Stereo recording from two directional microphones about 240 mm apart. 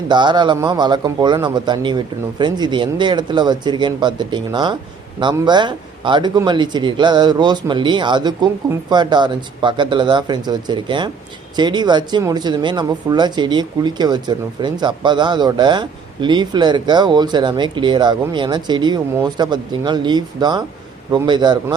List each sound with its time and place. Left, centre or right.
0.1 s speech: centre